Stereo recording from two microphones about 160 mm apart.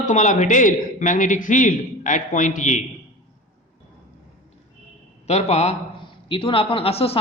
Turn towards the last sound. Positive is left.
turn(degrees=35)  # may be behind; listen again after turning